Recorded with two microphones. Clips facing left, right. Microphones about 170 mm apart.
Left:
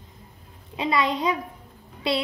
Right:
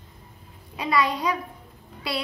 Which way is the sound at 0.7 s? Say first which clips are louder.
Even; 25° left (ahead or behind).